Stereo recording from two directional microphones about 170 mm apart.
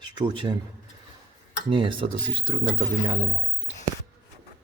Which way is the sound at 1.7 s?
30° right (ahead or behind).